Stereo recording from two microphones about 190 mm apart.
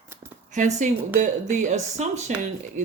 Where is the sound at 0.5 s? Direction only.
40° right (ahead or behind).